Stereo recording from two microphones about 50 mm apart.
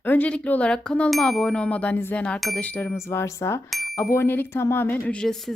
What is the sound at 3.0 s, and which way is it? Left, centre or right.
Speech, left.